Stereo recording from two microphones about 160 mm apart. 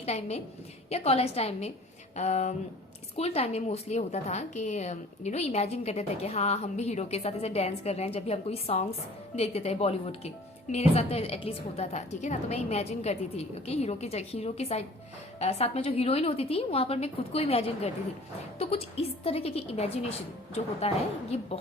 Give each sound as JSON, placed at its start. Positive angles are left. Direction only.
{"t": 0.0, "sound": "a woman's voice", "side_deg": 40}